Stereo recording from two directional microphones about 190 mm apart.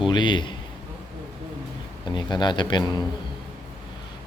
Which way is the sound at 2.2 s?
25° left (ahead or behind).